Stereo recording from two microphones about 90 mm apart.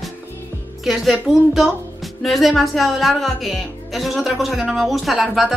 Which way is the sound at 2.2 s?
Centre (ahead or behind).